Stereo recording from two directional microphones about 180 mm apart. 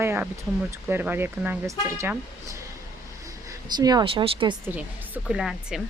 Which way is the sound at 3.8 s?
25° right (ahead or behind).